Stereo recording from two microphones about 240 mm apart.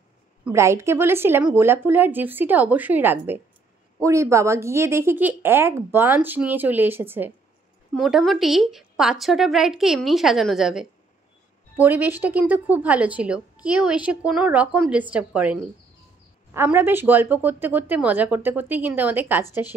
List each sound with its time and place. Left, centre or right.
0.5 s a woman's voice: centre